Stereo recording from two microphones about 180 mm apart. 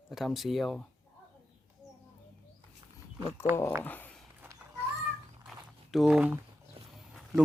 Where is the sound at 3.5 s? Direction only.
10° left (ahead or behind).